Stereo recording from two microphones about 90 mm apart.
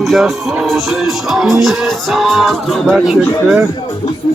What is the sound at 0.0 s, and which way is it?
Music, centre (ahead or behind).